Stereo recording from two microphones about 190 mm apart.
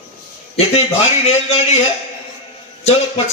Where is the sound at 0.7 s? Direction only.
35° left (ahead or behind).